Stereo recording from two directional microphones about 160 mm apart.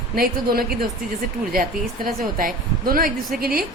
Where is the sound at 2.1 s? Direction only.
60° right (ahead or behind).